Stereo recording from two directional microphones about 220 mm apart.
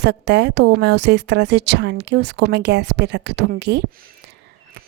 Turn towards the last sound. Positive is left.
turn(degrees=-50)  # may be behind; listen again after turning